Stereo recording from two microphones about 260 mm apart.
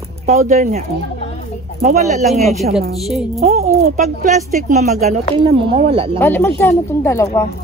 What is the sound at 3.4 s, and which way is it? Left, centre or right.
Speech, right.